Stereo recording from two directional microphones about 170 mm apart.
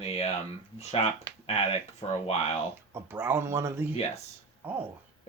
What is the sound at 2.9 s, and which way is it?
Speech, 15° right (ahead or behind).